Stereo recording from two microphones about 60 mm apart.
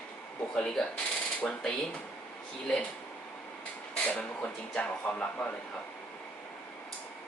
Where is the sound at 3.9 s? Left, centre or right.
Left.